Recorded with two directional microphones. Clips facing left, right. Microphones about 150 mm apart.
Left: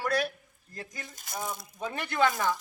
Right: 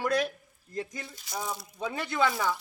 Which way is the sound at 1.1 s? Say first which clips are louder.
Right 1 dB; 50° left (ahead or behind).